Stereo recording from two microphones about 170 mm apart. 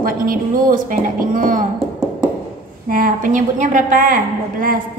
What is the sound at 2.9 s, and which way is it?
A woman's voice, 55° right (ahead or behind).